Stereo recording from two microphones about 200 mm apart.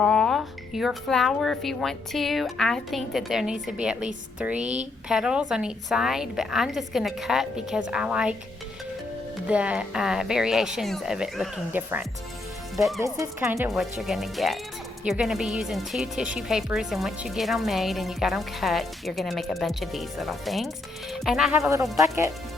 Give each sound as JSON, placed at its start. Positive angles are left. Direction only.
{"t": 0.0, "sound": "speech", "side_deg": 5}
{"t": 4.6, "sound": "speech", "side_deg": -35}
{"t": 5.0, "sound": "speech", "side_deg": -5}
{"t": 9.5, "sound": "speech", "side_deg": -5}
{"t": 13.1, "sound": "speech", "side_deg": -15}
{"t": 13.7, "sound": "speech", "side_deg": 0}